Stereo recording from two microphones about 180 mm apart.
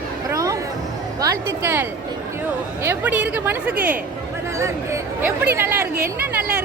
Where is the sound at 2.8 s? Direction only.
10° right (ahead or behind).